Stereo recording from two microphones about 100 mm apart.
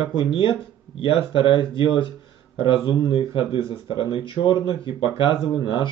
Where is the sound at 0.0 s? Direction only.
55° left (ahead or behind).